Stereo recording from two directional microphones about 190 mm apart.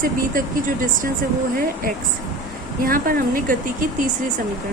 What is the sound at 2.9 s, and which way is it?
Speech, 50° right (ahead or behind).